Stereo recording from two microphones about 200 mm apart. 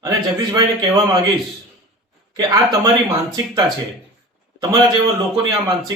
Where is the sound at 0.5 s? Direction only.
20° right (ahead or behind).